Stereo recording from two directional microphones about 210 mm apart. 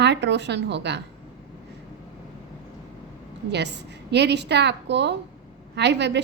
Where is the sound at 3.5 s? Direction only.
55° right (ahead or behind).